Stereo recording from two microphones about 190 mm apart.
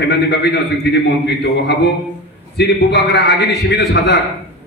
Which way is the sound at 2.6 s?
65° left (ahead or behind).